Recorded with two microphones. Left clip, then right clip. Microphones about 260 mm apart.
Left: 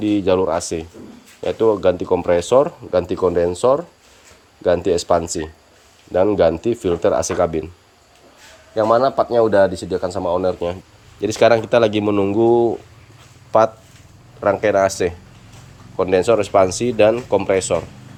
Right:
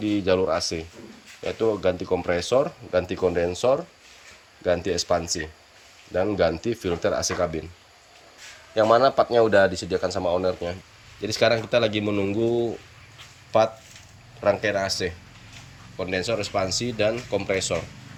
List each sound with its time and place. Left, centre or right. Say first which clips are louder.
0.0 s speech: left 6 dB; centre
8.8 s speech: left 3 dB; right
9.5 s speech: left 4 dB; centre